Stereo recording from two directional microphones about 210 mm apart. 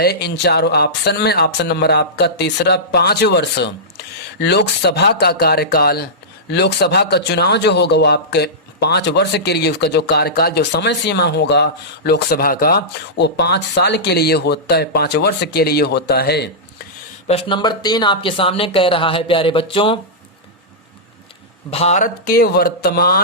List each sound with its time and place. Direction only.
0.0 s a man's voice: 50° left (ahead or behind)
17.2 s speech: 25° left (ahead or behind)
21.7 s a man's voice: 30° left (ahead or behind); by 23.2 s 45° left (ahead or behind)